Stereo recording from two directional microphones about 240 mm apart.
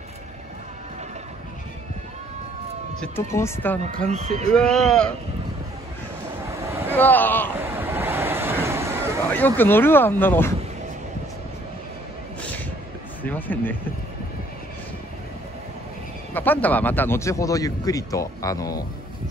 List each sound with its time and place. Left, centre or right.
3.0 s speech: centre
4.1 s speech: right
4.5 s speech: centre
6.4 s a sound: centre
7.0 s speech: centre
7.7 s a sound: centre
9.4 s speech: centre
13.2 s speech: centre
16.3 s speech: centre